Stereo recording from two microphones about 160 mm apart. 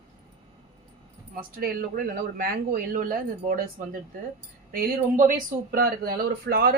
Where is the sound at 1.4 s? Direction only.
65° right (ahead or behind).